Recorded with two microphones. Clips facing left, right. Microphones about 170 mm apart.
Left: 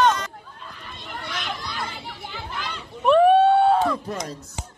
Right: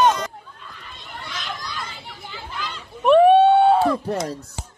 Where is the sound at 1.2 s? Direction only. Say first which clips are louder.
Left 1 dB; 60° left (ahead or behind).